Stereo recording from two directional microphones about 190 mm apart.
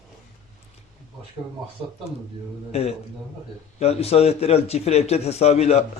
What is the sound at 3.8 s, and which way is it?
Speech, 35° left (ahead or behind).